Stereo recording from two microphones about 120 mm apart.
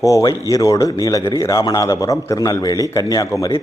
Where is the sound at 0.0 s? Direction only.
30° left (ahead or behind).